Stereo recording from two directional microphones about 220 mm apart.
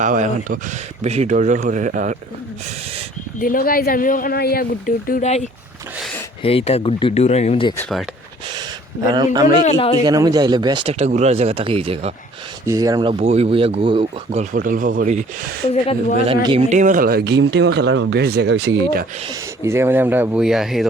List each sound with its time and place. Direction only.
0.0 s speech: 35° right (ahead or behind)
3.4 s speech: 40° left (ahead or behind)
7.8 s speech: centre (ahead or behind)
9.0 s speech: 20° right (ahead or behind)
9.6 s speech: 25° left (ahead or behind)
10.0 s speech: 15° right (ahead or behind)
12.6 s speech: 15° right (ahead or behind); by 15.2 s 35° right (ahead or behind)
15.7 s speech: 30° left (ahead or behind)
16.2 s speech: 25° right (ahead or behind); by 18.7 s 55° right (ahead or behind)
19.3 s speech: 10° right (ahead or behind)